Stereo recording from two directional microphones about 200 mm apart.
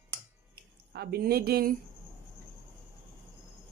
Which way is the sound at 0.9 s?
50° right (ahead or behind).